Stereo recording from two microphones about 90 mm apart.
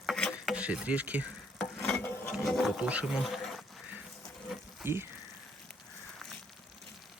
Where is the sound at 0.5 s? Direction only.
15° right (ahead or behind).